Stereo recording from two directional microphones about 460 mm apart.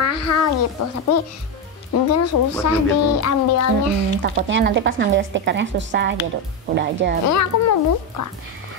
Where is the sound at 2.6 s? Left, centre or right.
Left.